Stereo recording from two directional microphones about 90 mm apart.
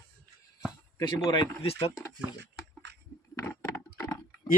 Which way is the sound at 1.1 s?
65° left (ahead or behind).